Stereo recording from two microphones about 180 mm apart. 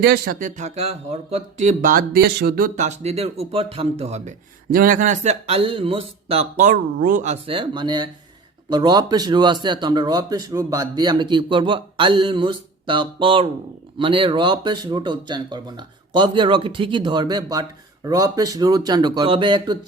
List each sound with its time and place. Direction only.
0.0 s speech: 55° right (ahead or behind); by 4.4 s 35° right (ahead or behind)
4.7 s speech: 50° right (ahead or behind); by 19.8 s 25° right (ahead or behind)